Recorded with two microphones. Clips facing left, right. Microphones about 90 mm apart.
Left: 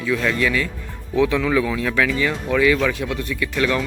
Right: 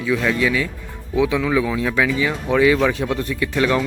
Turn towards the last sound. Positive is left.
turn(degrees=-25)  # may be behind; listen again after turning